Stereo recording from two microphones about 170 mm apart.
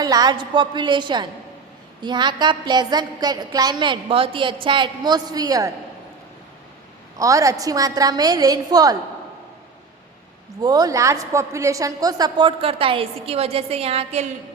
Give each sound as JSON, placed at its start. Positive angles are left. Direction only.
{"t": 0.0, "sound": "a woman's voice", "side_deg": -20}
{"t": 7.2, "sound": "a woman's voice", "side_deg": -20}
{"t": 10.6, "sound": "a woman's voice", "side_deg": -20}